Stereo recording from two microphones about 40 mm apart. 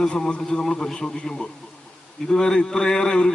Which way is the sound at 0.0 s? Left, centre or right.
Left.